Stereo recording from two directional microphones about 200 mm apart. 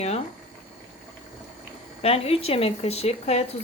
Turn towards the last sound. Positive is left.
turn(degrees=30)  # may be behind; listen again after turning